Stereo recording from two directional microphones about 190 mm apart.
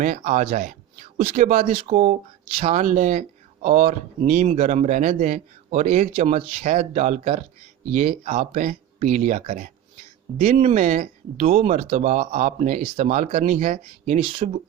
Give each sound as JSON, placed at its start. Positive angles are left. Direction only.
{"t": 0.0, "sound": "speech", "side_deg": -40}
{"t": 1.7, "sound": "speech", "side_deg": -30}